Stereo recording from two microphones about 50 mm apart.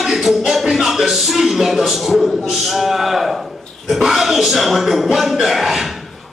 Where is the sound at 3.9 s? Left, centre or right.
Centre.